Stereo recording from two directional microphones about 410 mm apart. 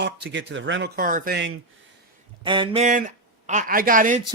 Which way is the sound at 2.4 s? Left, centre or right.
Centre.